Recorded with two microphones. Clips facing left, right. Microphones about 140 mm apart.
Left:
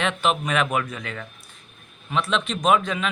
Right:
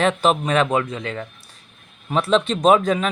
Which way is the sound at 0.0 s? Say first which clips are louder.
Right 5 dB; 40° right (ahead or behind).